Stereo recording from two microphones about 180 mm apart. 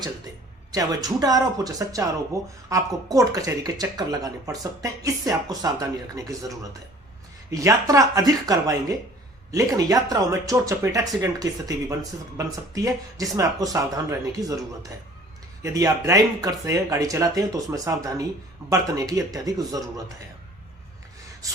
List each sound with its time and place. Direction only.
0.7 s speech: 20° right (ahead or behind)
12.4 s speech: 20° right (ahead or behind)
21.4 s gasp: 20° right (ahead or behind)